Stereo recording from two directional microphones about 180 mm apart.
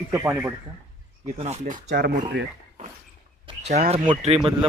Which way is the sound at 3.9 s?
35° right (ahead or behind).